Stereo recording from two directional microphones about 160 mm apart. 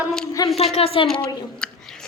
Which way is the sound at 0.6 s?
40° left (ahead or behind).